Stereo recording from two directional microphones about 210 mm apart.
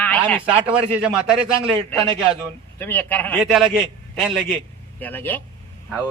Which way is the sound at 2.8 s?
10° left (ahead or behind).